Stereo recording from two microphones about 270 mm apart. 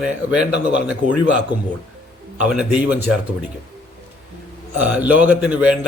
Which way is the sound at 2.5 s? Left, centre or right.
Centre.